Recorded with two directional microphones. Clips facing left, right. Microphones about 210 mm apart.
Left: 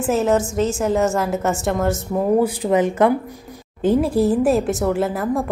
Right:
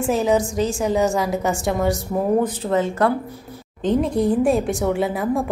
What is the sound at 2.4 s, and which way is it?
Speech, 15° left (ahead or behind).